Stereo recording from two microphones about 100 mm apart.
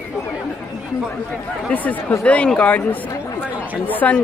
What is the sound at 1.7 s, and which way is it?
A woman's voice, 15° left (ahead or behind).